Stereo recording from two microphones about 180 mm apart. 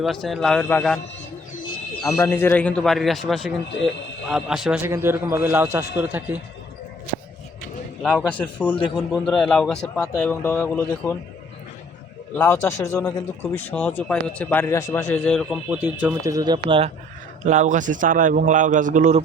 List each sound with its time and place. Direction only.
0.0 s a man's voice: centre (ahead or behind)
2.1 s a man's voice: 15° left (ahead or behind); by 4.8 s 5° right (ahead or behind)
4.8 s a man's voice: 15° right (ahead or behind)
8.0 s a man's voice: 5° left (ahead or behind)
12.3 s a man's voice: 10° left (ahead or behind); by 16.9 s 30° right (ahead or behind)
17.4 s a man's voice: 45° right (ahead or behind)